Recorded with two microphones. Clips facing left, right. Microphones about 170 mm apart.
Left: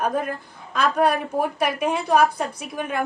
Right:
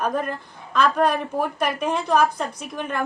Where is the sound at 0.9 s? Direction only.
10° left (ahead or behind).